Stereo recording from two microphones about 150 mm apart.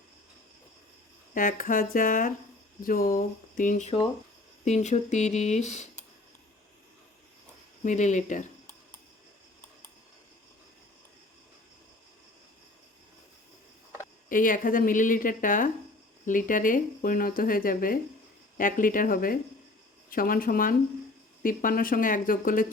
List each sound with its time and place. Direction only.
1.3 s speech: 65° left (ahead or behind)
2.8 s speech: 70° left (ahead or behind); by 6.1 s 50° left (ahead or behind)
7.9 s speech: 55° left (ahead or behind)
14.3 s speech: 65° left (ahead or behind)